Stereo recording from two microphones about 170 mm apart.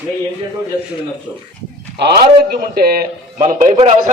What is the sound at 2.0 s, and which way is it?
A man's voice, 70° right (ahead or behind).